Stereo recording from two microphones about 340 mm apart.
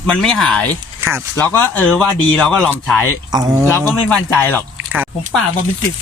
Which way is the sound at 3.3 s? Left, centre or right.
Centre.